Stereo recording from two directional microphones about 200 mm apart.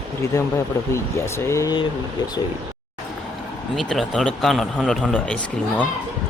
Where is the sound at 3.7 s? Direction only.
Centre (ahead or behind).